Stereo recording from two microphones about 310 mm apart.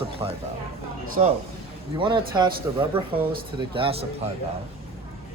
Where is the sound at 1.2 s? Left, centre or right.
Right.